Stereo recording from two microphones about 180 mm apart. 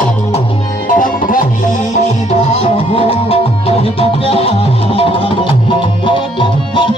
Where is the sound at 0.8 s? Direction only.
50° left (ahead or behind).